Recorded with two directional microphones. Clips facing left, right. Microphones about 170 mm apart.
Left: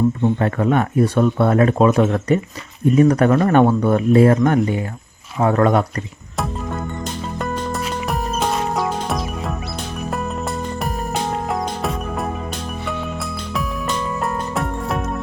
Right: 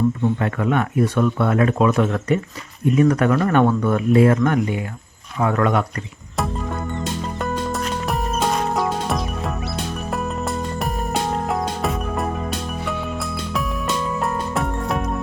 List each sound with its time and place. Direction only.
0.2 s speech: 35° left (ahead or behind)
6.3 s music: centre (ahead or behind)